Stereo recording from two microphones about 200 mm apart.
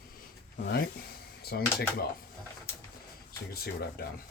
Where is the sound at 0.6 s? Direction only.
55° left (ahead or behind).